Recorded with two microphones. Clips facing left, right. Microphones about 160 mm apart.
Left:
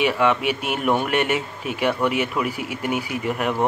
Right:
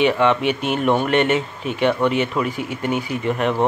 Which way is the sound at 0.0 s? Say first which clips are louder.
Right 3 dB; 5° left (ahead or behind).